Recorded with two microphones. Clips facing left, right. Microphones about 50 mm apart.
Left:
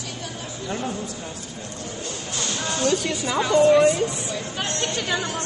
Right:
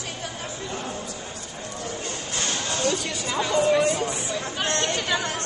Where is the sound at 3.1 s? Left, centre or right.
Centre.